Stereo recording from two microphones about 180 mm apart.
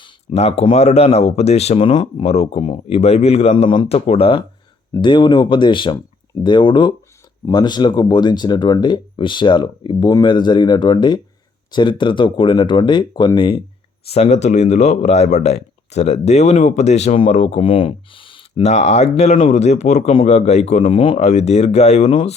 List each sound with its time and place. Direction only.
0.0 s speech: 30° left (ahead or behind)
14.1 s speech: 35° left (ahead or behind)